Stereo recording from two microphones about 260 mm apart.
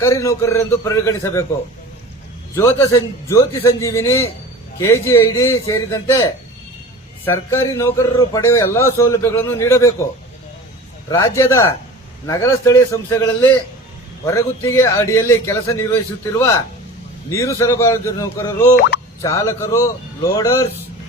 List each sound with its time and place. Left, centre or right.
0.0 s a man's voice: centre
2.6 s a man's voice: centre
11.1 s a man's voice: centre
17.3 s a man's voice: centre